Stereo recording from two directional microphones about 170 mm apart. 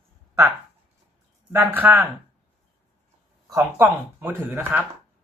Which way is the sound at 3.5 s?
15° right (ahead or behind).